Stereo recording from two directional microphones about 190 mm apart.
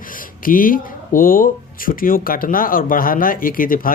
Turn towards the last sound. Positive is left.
turn(degrees=50)  # may be behind; listen again after turning